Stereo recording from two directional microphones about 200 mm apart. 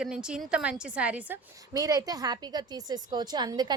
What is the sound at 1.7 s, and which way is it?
A woman's voice, 20° right (ahead or behind).